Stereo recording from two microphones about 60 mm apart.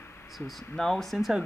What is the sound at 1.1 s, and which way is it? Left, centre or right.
Speech, centre.